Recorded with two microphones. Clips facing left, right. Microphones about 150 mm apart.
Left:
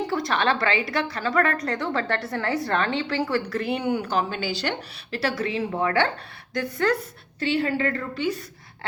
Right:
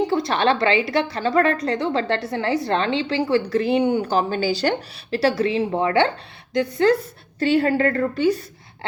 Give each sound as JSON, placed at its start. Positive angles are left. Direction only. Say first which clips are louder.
{"t": 0.1, "sound": "a woman's voice", "louder": "right 4 dB", "side_deg": -25}
{"t": 7.3, "sound": "a woman's voice", "louder": "right 6 dB", "side_deg": -45}